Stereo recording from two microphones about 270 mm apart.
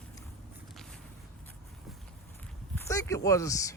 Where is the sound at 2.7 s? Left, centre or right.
Centre.